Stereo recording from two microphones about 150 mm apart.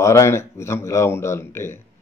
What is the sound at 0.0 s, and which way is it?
A man's voice, 20° left (ahead or behind).